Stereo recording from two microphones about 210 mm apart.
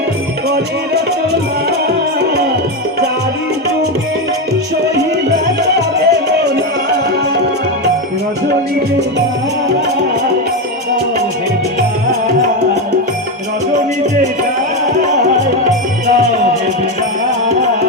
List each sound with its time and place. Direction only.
6.0 s music: 50° right (ahead or behind)